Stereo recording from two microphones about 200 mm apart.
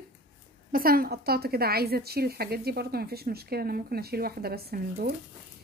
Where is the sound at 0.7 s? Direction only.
45° right (ahead or behind).